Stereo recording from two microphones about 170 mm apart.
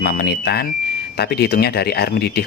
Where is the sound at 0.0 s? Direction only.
65° left (ahead or behind).